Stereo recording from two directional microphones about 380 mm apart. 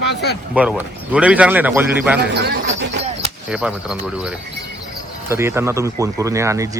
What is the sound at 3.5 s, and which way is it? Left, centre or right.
Speech, centre.